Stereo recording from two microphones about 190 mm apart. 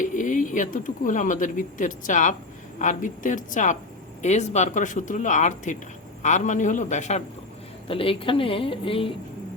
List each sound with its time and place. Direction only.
0.0 s speech: 40° left (ahead or behind)